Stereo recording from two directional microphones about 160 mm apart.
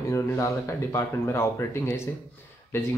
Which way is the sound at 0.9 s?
20° left (ahead or behind).